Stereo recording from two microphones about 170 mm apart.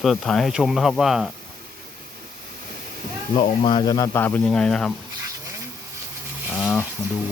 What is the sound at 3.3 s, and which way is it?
Speech, 30° left (ahead or behind).